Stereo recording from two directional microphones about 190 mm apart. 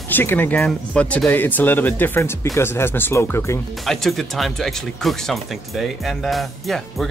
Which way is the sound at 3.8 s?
Centre (ahead or behind).